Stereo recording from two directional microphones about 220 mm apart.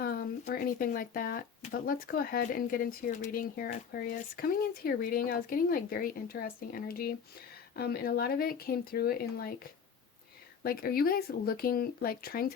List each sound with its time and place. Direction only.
0.0 s speech: 40° left (ahead or behind)
10.6 s speech: 45° left (ahead or behind)